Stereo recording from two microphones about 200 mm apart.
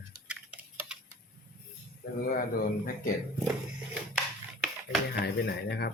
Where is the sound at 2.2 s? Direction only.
45° left (ahead or behind).